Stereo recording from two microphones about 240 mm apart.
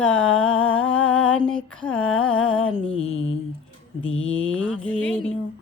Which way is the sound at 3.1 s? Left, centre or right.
Left.